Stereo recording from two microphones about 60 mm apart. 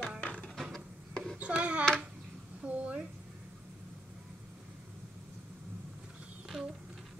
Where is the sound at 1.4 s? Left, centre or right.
Right.